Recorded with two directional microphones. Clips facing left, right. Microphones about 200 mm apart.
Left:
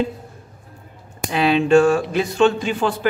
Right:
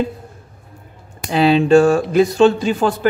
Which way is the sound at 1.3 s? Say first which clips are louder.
Right 3 dB; 35° right (ahead or behind).